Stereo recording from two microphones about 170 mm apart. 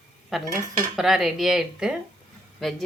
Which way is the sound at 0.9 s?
Centre (ahead or behind).